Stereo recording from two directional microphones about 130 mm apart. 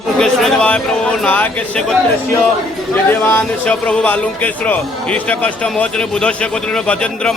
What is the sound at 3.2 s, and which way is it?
Speech, 10° left (ahead or behind).